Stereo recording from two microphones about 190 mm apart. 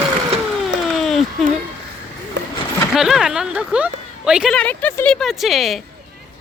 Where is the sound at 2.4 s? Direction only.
75° right (ahead or behind).